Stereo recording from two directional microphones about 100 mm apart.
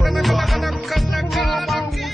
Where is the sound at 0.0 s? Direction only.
Centre (ahead or behind).